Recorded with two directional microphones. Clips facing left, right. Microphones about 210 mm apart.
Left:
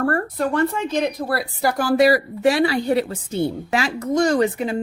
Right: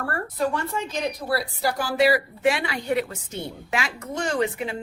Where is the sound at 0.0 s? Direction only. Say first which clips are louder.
Left 5 dB; 55° left (ahead or behind).